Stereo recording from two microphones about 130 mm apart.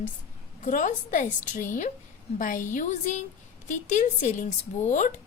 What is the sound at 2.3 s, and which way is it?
A woman's voice, 90° left.